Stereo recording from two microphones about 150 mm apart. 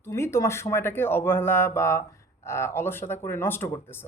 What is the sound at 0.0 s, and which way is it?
Speech, 20° left (ahead or behind).